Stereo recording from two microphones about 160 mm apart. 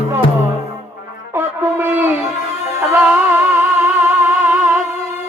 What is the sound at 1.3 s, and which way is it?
Music, 15° right (ahead or behind).